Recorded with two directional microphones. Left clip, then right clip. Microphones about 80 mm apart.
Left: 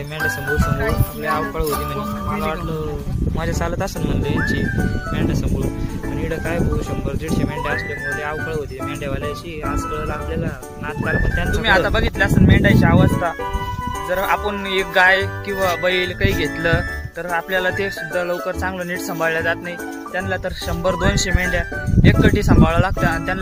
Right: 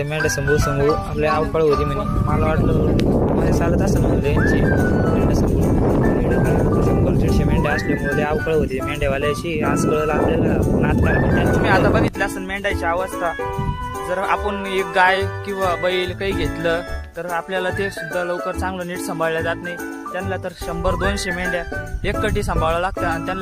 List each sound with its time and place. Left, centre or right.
0.2 s speech: right
7.3 s speech: right
11.6 s speech: right
14.1 s speech: right
20.8 s speech: right